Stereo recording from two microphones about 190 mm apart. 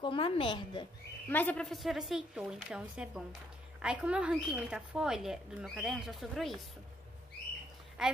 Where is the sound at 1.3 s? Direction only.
10° left (ahead or behind).